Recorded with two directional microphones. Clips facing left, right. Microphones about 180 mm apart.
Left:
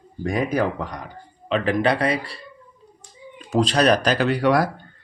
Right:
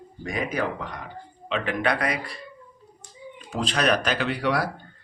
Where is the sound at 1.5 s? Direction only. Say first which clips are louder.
Left 5 dB; 40° left (ahead or behind).